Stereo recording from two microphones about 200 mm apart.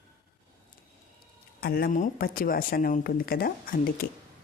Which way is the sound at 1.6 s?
50° left (ahead or behind).